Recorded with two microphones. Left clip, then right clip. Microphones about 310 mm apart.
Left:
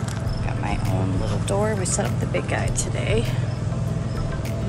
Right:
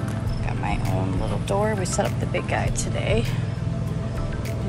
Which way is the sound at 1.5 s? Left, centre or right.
Centre.